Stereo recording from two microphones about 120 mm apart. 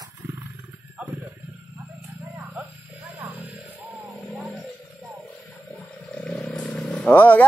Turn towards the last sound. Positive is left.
turn(degrees=15)  # may be behind; listen again after turning